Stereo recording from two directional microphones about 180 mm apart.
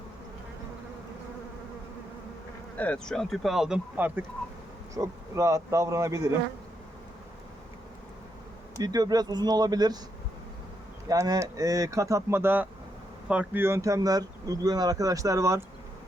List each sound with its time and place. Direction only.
2.7 s speech: 5° left (ahead or behind); by 6.3 s 15° right (ahead or behind)
8.7 s speech: 20° right (ahead or behind)
11.1 s speech: 20° right (ahead or behind)